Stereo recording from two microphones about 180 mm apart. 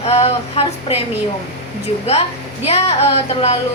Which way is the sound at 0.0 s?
35° left (ahead or behind).